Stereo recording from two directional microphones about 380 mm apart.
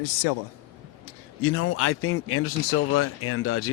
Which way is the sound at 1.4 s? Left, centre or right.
Left.